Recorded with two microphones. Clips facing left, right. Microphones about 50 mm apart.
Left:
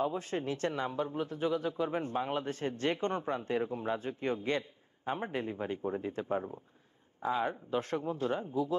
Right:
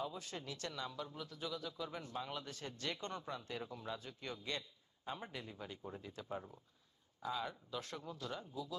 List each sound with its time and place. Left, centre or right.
0.0 s speech: left